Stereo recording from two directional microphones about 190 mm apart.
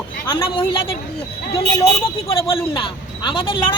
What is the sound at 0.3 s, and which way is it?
Speech, 25° left (ahead or behind).